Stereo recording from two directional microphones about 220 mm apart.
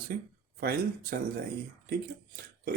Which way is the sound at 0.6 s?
40° right (ahead or behind).